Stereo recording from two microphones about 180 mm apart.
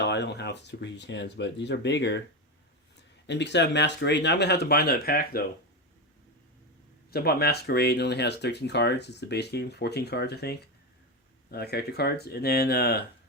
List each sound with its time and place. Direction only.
0.0 s speech: 70° left (ahead or behind)
3.2 s speech: 75° left (ahead or behind); by 5.5 s 55° left (ahead or behind)
7.1 s speech: 60° left (ahead or behind)